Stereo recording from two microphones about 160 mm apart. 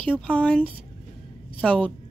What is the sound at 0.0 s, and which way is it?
A woman's voice, 10° left (ahead or behind).